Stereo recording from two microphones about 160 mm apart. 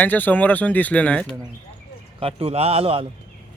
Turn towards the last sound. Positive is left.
turn(degrees=-35)  # may be behind; listen again after turning